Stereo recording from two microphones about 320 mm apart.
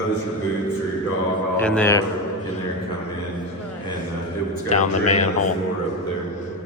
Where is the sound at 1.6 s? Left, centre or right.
Centre.